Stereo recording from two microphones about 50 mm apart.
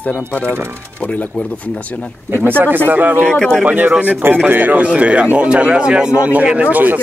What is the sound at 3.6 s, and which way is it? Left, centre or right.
A man's voice, right.